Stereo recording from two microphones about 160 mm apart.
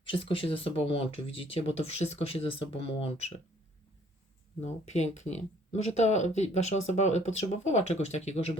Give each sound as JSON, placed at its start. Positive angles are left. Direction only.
{"t": 0.0, "sound": "speech", "side_deg": 35}
{"t": 4.6, "sound": "speech", "side_deg": 45}